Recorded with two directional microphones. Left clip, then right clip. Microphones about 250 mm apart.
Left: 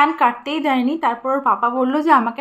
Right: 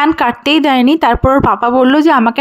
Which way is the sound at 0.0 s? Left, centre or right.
Right.